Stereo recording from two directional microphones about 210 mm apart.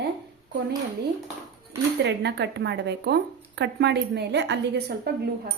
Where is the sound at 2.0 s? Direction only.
55° right (ahead or behind).